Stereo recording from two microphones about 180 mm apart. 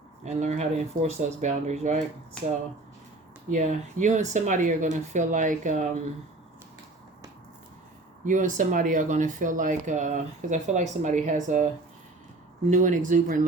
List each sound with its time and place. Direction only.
0.3 s speech: 40° right (ahead or behind)
3.5 s speech: 40° right (ahead or behind)
8.2 s speech: 45° right (ahead or behind)
12.7 s speech: 45° right (ahead or behind)